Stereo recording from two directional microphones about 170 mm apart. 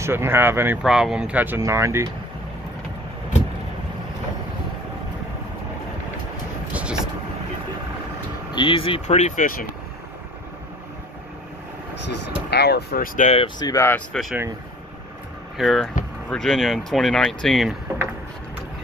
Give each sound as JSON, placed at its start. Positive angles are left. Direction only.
{"t": 0.0, "sound": "speech", "side_deg": -15}
{"t": 6.7, "sound": "vehicle", "side_deg": -5}
{"t": 8.5, "sound": "speech", "side_deg": 30}
{"t": 12.1, "sound": "speech", "side_deg": 75}
{"t": 13.6, "sound": "speech", "side_deg": 20}
{"t": 15.5, "sound": "speech", "side_deg": 0}